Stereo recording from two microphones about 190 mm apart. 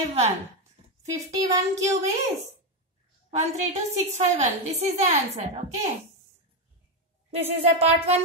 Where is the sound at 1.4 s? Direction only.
20° right (ahead or behind).